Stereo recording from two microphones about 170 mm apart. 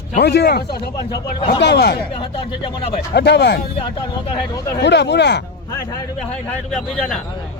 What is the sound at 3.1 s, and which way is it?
Speech, 80° left.